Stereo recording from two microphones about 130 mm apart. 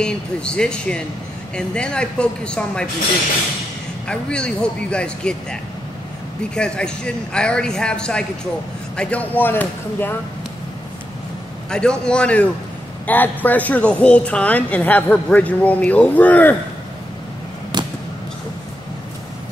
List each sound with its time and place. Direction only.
0.0 s a woman's voice: 5° left (ahead or behind)
4.1 s a woman's voice: 5° left (ahead or behind)
11.7 s a woman's voice: 5° left (ahead or behind)
17.7 s a sound: 35° right (ahead or behind)